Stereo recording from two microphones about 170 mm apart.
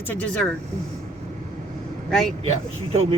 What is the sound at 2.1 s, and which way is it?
Speech, 5° left (ahead or behind).